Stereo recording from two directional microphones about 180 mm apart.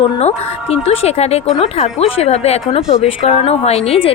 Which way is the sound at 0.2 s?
35° left (ahead or behind).